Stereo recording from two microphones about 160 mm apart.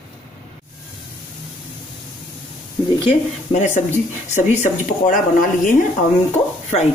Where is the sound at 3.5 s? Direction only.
45° left (ahead or behind).